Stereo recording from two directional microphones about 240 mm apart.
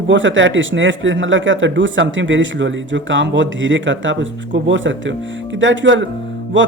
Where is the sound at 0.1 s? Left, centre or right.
Right.